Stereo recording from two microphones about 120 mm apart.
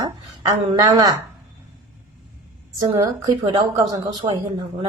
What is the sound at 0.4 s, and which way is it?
Speech, 40° right (ahead or behind).